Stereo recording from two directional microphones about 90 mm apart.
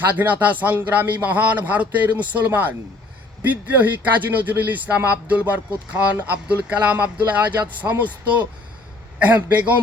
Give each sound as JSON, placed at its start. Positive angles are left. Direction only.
{"t": 0.1, "sound": "a man's voice", "side_deg": -20}
{"t": 9.1, "sound": "speech", "side_deg": -15}